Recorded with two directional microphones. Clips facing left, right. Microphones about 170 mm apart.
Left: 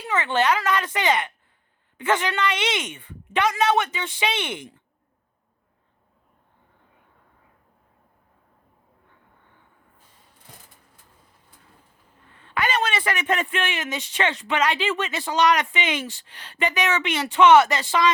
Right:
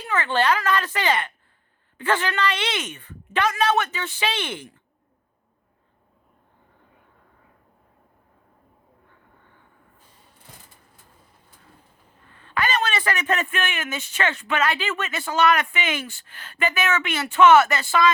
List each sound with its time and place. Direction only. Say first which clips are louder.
0.1 s speech: even; 20° left (ahead or behind)
12.3 s speech: even; 20° left (ahead or behind)
13.4 s speech: left 1 dB; 25° left (ahead or behind)